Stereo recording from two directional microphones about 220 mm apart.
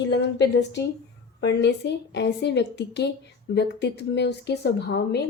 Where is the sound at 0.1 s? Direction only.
50° left (ahead or behind).